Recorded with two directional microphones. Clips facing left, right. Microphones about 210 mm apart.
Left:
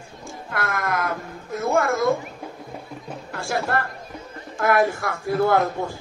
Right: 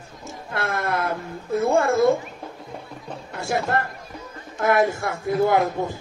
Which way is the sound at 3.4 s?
20° right (ahead or behind).